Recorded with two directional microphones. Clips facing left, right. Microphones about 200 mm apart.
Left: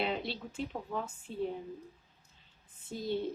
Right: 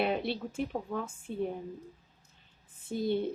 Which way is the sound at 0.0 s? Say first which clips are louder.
Right 4 dB; 55° right (ahead or behind).